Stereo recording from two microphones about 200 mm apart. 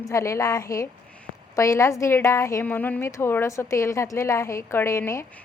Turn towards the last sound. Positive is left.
turn(degrees=15)  # may be behind; listen again after turning